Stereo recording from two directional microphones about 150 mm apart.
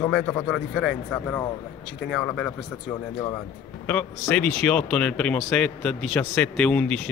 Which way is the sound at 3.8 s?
5° left (ahead or behind).